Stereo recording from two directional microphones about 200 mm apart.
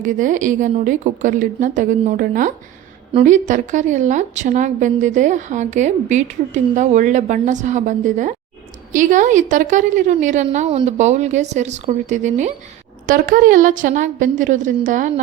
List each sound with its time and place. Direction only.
0.0 s a woman's voice: 40° right (ahead or behind)